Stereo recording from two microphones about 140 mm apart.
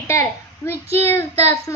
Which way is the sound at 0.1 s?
20° left (ahead or behind).